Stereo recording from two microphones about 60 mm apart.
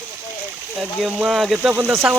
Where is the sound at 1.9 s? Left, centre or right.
Right.